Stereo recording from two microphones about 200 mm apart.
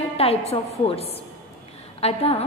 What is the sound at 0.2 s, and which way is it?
A woman's voice, 30° left (ahead or behind).